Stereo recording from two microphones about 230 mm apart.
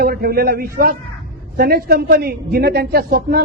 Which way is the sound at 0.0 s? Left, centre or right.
Right.